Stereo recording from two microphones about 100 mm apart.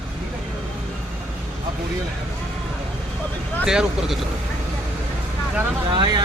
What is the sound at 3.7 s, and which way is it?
Speech, 5° right (ahead or behind).